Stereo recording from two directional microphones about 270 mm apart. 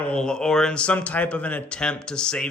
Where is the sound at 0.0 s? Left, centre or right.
Centre.